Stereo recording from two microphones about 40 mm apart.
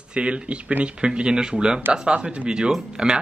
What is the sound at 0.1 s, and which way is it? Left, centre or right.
Speech, right.